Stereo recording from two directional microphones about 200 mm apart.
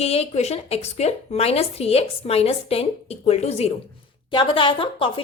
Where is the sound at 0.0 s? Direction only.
30° left (ahead or behind).